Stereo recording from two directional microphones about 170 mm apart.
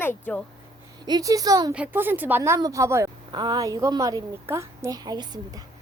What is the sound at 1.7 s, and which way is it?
A woman's voice, 10° right (ahead or behind).